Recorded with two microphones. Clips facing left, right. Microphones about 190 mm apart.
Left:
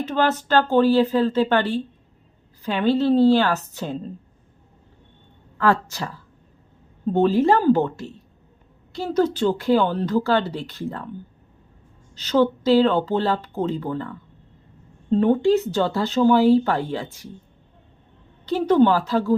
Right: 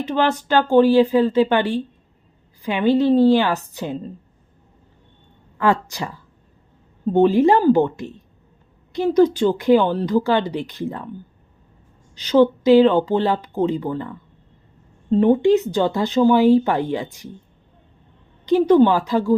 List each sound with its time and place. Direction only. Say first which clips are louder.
0.0 s speech: right 1 dB; 10° right (ahead or behind)
5.5 s speech: right 1 dB; 15° right (ahead or behind)
12.1 s speech: right 4 dB; 15° right (ahead or behind)
18.4 s speech: right 3 dB; 15° right (ahead or behind)